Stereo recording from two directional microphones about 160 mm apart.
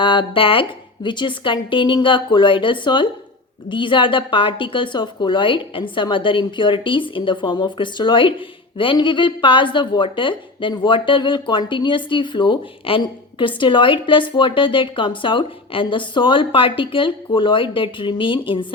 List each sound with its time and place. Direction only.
0.0 s speech: 30° left (ahead or behind)